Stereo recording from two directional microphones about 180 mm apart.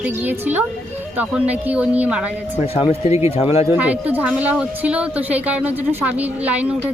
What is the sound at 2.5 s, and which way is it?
A man's voice, 35° left (ahead or behind).